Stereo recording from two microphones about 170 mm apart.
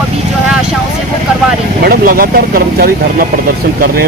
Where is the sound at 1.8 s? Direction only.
60° right (ahead or behind).